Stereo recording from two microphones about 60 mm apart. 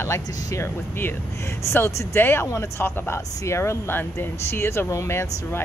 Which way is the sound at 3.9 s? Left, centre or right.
Left.